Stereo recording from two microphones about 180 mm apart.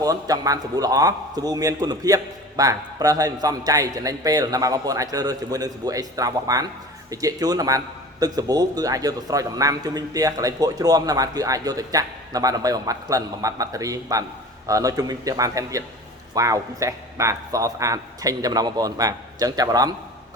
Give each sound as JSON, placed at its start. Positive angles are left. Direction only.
{"t": 0.0, "sound": "a man's voice", "side_deg": -20}